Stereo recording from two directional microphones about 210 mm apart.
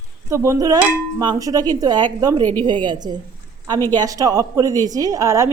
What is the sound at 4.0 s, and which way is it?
Dishes, 15° right (ahead or behind).